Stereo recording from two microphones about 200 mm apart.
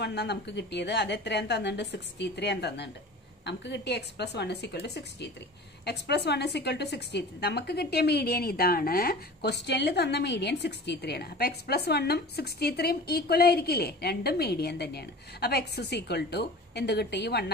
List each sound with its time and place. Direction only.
0.0 s a woman's voice: 55° left (ahead or behind)